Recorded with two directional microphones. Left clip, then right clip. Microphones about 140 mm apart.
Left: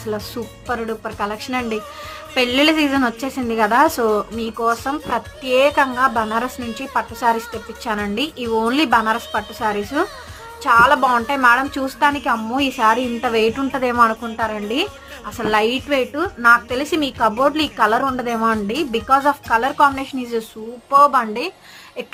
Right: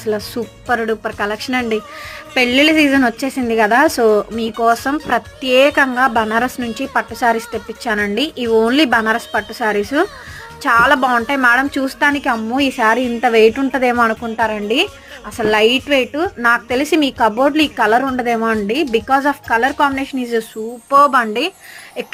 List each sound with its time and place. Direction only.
0.0 s a woman's voice: 30° right (ahead or behind)
0.7 s a woman's voice: 45° right (ahead or behind); by 20.4 s 25° right (ahead or behind)
20.9 s a woman's voice: 40° right (ahead or behind)